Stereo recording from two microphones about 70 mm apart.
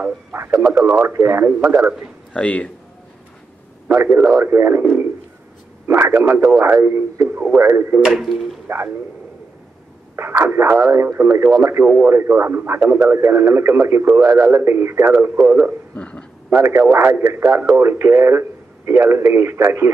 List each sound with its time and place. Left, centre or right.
0.3 s speech: right
2.3 s speech: centre
3.9 s speech: right
5.9 s speech: right
8.0 s speech: centre
8.6 s speech: right
10.1 s speech: right
11.8 s speech: right
12.1 s speech: right
15.4 s speech: right
15.9 s a sound: centre
16.4 s speech: right
17.6 s speech: right